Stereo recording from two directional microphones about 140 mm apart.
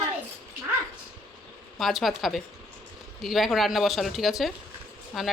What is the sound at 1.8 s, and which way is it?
Speech, centre (ahead or behind).